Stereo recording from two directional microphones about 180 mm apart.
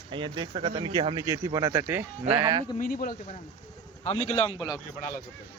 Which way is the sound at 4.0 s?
35° left (ahead or behind).